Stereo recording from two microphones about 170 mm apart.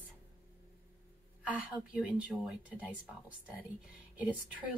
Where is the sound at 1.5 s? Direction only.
10° right (ahead or behind).